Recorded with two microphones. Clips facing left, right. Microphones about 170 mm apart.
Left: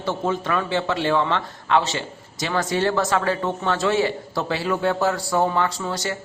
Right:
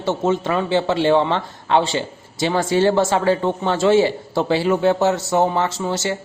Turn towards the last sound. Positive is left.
turn(degrees=-25)  # may be behind; listen again after turning